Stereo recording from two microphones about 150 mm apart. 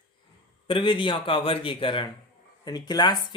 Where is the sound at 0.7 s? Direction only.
35° left (ahead or behind).